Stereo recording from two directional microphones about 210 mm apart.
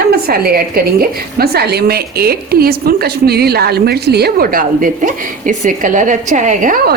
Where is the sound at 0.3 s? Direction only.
45° right (ahead or behind).